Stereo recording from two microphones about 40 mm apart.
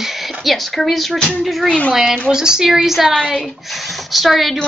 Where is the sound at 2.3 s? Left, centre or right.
Centre.